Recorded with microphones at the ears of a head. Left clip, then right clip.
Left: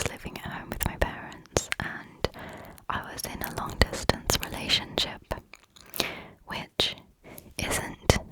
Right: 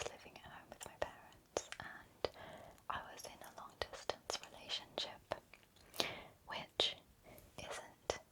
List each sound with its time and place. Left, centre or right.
0.0 s whispering: left